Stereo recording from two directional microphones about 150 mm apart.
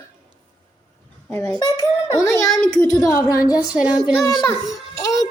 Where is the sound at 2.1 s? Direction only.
20° left (ahead or behind).